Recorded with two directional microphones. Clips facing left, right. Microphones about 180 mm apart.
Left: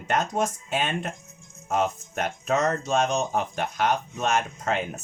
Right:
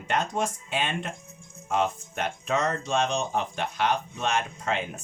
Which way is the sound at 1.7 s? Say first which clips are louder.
Left 1 dB; 45° left (ahead or behind).